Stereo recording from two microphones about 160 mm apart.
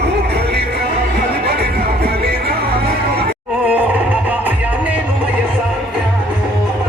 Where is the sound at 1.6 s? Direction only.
75° right (ahead or behind).